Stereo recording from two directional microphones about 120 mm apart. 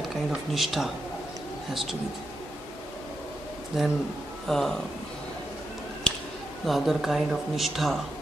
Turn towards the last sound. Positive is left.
turn(degrees=0)  # may be behind; listen again after turning